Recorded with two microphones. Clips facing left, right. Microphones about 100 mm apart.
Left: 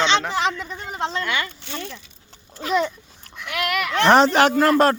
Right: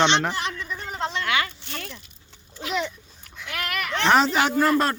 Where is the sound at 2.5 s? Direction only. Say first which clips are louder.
Left 6 dB; 45° left (ahead or behind).